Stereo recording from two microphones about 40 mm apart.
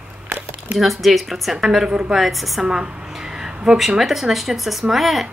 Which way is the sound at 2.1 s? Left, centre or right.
Centre.